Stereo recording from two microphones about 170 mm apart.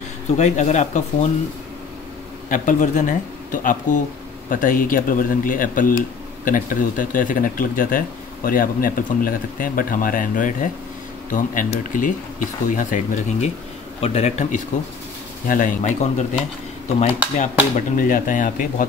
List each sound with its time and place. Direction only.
0.4 s speech: 45° left (ahead or behind)
2.5 s speech: 50° left (ahead or behind)
14.0 s speech: 40° left (ahead or behind)
17.7 s speech: 55° left (ahead or behind)